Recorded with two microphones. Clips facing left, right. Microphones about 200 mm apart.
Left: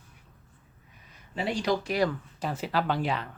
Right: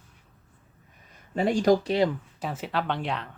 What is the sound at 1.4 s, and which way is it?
Speech, 45° right (ahead or behind).